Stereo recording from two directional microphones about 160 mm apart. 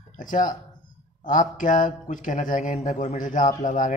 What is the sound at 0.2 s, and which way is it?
A man's voice, 55° left (ahead or behind).